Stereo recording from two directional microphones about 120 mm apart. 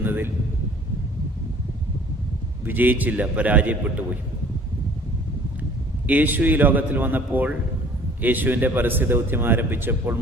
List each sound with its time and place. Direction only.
0.0 s a man's voice: 15° right (ahead or behind)
2.6 s a man's voice: 15° right (ahead or behind)
6.1 s a man's voice: 15° right (ahead or behind)